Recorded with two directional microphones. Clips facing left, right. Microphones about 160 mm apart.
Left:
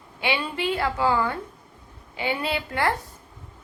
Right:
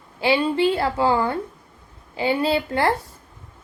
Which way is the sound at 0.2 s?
30° right (ahead or behind).